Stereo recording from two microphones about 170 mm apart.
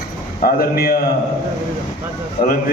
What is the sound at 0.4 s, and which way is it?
Speech, 60° left (ahead or behind).